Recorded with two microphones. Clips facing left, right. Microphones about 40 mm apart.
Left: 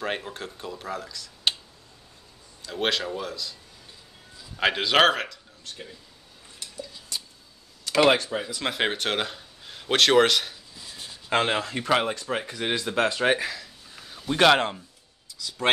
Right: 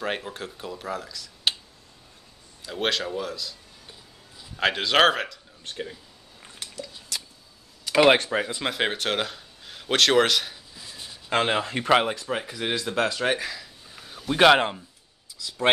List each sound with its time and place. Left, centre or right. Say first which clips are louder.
0.0 s speech: right 1 dB; centre
2.6 s speech: even; centre
4.6 s speech: even; centre
5.6 s speech: right 7 dB; right
6.7 s a sound: even; right
7.8 s a sound: right 2 dB; centre
8.2 s speech: right 4 dB; right
8.6 s speech: even; centre
11.6 s speech: right 3 dB; centre
12.3 s speech: even; centre
13.6 s a sound: even; centre
15.4 s speech: right 2 dB; centre